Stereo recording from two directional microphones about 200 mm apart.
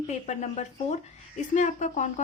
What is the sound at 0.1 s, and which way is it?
Speech, 35° left (ahead or behind).